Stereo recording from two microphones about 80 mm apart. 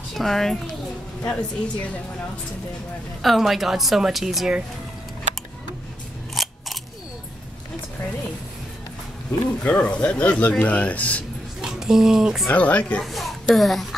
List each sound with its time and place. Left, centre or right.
0.1 s a child's voice: centre
1.2 s speech: centre
3.2 s a woman's voice: centre
6.3 s scissors: centre
9.6 s speech: centre
11.6 s speech: centre
12.5 s speech: centre
13.0 s a child's voice: centre